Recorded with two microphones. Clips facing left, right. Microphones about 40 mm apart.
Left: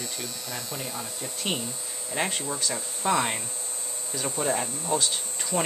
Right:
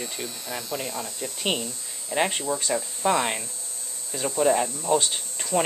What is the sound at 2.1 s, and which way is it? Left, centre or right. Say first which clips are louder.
Speech: right 4 dB; centre.